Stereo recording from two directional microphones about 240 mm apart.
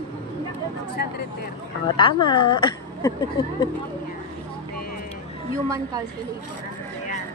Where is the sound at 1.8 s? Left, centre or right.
Centre.